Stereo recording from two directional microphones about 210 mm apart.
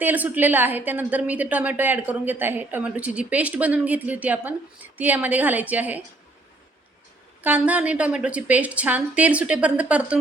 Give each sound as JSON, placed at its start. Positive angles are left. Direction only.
{"t": 0.0, "sound": "a woman's voice", "side_deg": -10}
{"t": 7.4, "sound": "a woman's voice", "side_deg": -5}